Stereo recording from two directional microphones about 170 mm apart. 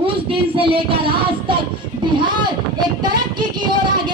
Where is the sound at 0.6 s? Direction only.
30° right (ahead or behind).